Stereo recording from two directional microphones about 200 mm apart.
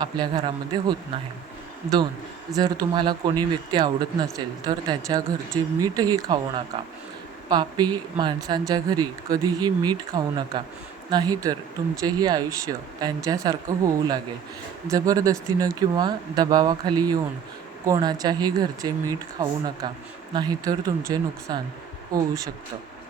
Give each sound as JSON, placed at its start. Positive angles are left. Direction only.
{"t": 0.0, "sound": "speech", "side_deg": -20}
{"t": 2.6, "sound": "speech", "side_deg": -20}
{"t": 7.5, "sound": "speech", "side_deg": -20}